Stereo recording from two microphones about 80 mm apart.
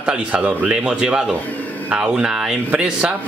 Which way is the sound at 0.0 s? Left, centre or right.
Centre.